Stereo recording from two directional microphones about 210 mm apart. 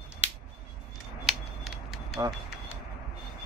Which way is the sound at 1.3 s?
Centre (ahead or behind).